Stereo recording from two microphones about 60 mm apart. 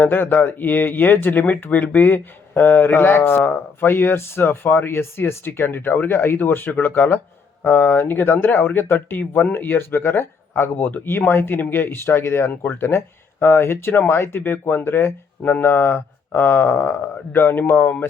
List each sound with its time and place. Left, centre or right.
0.0 s speech: left
12.5 s speech: left
13.4 s speech: left